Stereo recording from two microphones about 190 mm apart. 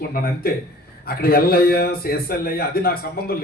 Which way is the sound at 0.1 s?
50° left (ahead or behind).